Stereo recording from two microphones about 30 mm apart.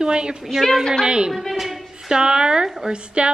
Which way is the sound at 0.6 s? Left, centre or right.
Centre.